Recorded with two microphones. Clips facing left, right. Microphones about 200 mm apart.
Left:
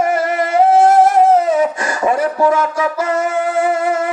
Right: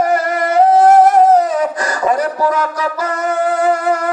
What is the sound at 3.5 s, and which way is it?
Music, 25° left (ahead or behind).